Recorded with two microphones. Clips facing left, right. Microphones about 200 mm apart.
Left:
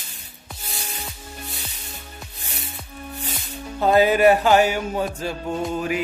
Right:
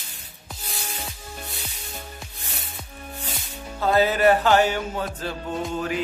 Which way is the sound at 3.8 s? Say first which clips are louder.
Left 3 dB; 15° left (ahead or behind).